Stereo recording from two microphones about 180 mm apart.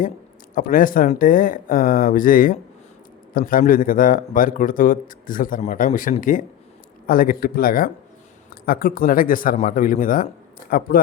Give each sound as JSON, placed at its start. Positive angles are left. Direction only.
{"t": 0.5, "sound": "a man's voice", "side_deg": 50}